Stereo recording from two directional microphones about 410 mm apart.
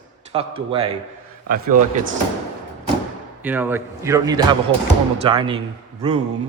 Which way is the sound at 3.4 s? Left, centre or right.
Centre.